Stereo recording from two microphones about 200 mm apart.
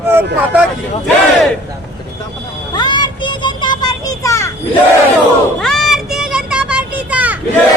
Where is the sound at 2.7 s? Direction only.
20° left (ahead or behind).